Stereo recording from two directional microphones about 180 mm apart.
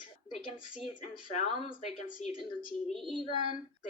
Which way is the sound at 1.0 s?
40° left (ahead or behind).